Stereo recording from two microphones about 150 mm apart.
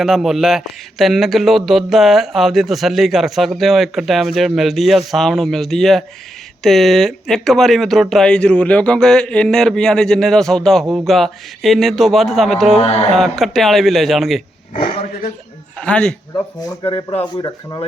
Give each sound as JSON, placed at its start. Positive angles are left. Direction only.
{"t": 0.0, "sound": "speech", "side_deg": 0}
{"t": 12.8, "sound": "speech", "side_deg": 45}
{"t": 13.1, "sound": "speech", "side_deg": 0}
{"t": 15.8, "sound": "speech", "side_deg": 5}
{"t": 17.3, "sound": "speech", "side_deg": 30}